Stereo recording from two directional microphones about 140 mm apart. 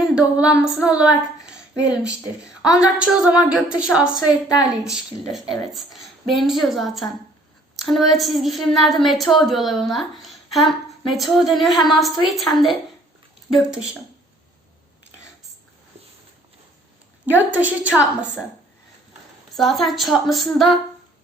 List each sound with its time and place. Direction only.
0.1 s speech: 5° right (ahead or behind)
1.5 s a sound: 5° right (ahead or behind)
2.7 s a woman's voice: 5° right (ahead or behind)
4.3 s a woman's voice: 25° left (ahead or behind)
4.8 s a woman's voice: 5° right (ahead or behind)
17.5 s speech: 10° right (ahead or behind)
19.5 s a woman's voice: centre (ahead or behind)